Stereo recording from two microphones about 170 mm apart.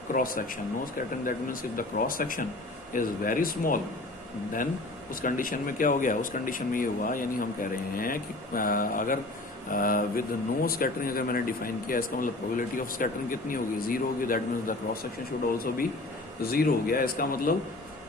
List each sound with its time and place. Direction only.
0.1 s speech: 55° left (ahead or behind)
1.7 s speech: 55° left (ahead or behind)
5.2 s speech: 55° left (ahead or behind)